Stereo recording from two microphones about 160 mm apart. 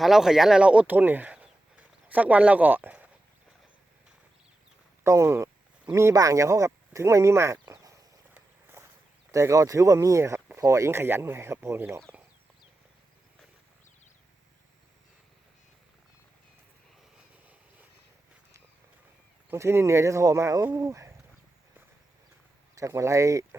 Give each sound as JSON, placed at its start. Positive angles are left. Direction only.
{"t": 0.0, "sound": "speech", "side_deg": 0}
{"t": 5.0, "sound": "speech", "side_deg": -15}
{"t": 8.3, "sound": "walk", "side_deg": -15}
{"t": 9.3, "sound": "speech", "side_deg": -20}
{"t": 19.5, "sound": "speech", "side_deg": -15}
{"t": 22.8, "sound": "speech", "side_deg": -20}